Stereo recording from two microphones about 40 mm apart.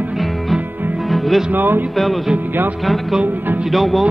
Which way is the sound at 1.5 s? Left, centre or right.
Right.